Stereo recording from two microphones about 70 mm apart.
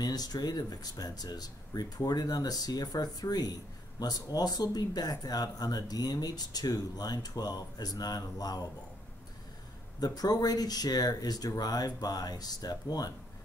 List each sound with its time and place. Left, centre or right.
0.0 s speech: left
9.9 s speech: left